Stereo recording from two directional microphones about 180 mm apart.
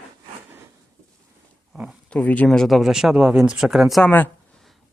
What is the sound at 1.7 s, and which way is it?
Speech, centre (ahead or behind).